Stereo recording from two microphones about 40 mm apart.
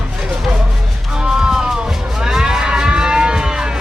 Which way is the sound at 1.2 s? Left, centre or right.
Centre.